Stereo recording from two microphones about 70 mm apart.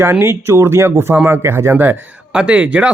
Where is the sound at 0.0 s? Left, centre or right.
Right.